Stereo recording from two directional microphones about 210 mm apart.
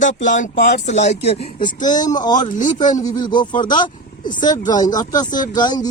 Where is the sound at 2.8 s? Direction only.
20° left (ahead or behind).